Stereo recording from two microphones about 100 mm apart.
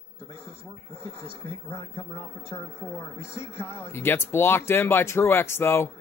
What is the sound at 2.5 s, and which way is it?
Speech, 25° left (ahead or behind).